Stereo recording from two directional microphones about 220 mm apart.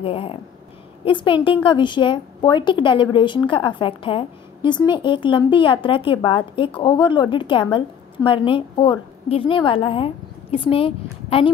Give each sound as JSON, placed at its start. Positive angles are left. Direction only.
{"t": 0.0, "sound": "a woman's voice", "side_deg": 25}